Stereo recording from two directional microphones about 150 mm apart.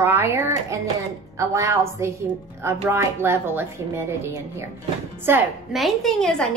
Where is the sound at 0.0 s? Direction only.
15° right (ahead or behind).